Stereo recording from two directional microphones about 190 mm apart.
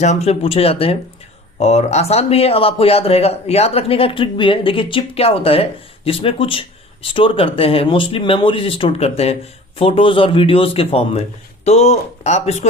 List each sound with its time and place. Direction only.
0.0 s speech: 35° left (ahead or behind)